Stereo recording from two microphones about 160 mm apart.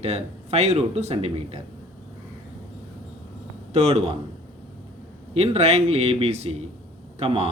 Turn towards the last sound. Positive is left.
turn(degrees=-40)  # may be behind; listen again after turning